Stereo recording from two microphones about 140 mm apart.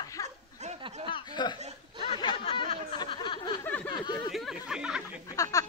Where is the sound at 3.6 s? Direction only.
10° left (ahead or behind).